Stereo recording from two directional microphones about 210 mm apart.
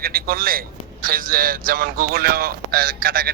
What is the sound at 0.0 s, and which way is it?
A man's voice, 45° right (ahead or behind).